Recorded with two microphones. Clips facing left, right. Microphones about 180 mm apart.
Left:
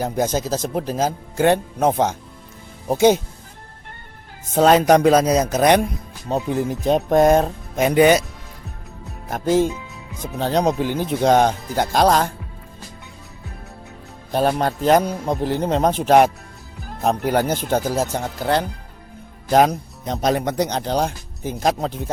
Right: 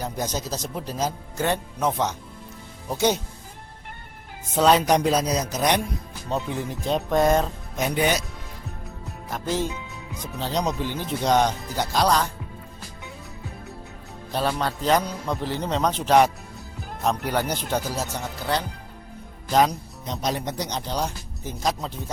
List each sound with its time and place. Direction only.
0.0 s speech: 50° left (ahead or behind)
4.5 s speech: 50° left (ahead or behind)
7.9 s speech: 65° left (ahead or behind)
9.3 s speech: 50° left (ahead or behind)
14.3 s speech: 50° left (ahead or behind)